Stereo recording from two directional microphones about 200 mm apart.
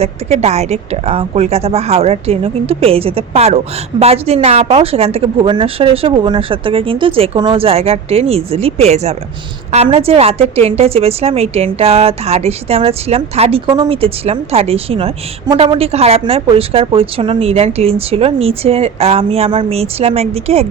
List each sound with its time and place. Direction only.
0.0 s a woman's voice: 35° right (ahead or behind)